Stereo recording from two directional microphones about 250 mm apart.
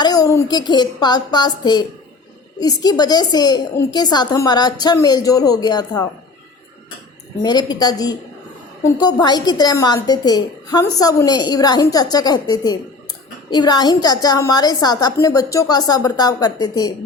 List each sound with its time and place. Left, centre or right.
0.0 s a woman's voice: centre
7.4 s a woman's voice: centre